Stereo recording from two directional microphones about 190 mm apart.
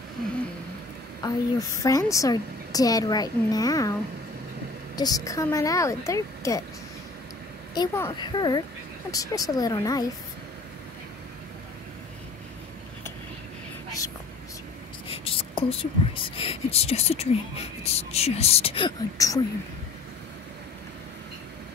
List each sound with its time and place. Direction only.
1.2 s a woman's voice: 20° left (ahead or behind)
4.9 s a woman's voice: 20° left (ahead or behind)
7.7 s a woman's voice: 20° left (ahead or behind)
15.0 s speech: 30° left (ahead or behind)